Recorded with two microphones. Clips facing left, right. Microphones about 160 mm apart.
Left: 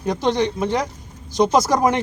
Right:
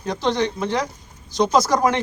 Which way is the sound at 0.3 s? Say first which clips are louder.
Left 1 dB; 15° left (ahead or behind).